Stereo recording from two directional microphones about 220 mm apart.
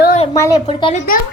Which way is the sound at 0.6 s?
30° left (ahead or behind).